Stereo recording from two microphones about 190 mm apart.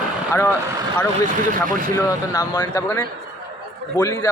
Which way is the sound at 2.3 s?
20° left (ahead or behind).